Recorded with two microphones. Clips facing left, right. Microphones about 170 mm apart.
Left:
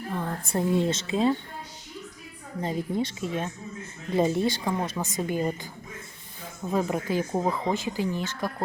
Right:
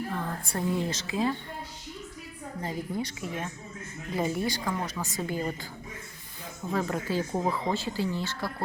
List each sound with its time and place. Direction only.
0.1 s speech: 20° left (ahead or behind)
2.6 s speech: 20° left (ahead or behind)
6.7 s speech: 20° left (ahead or behind)